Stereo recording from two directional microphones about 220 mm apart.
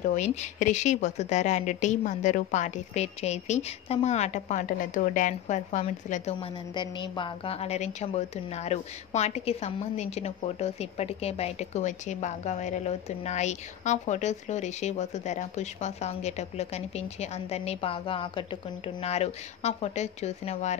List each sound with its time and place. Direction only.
0.1 s a woman's voice: 35° left (ahead or behind)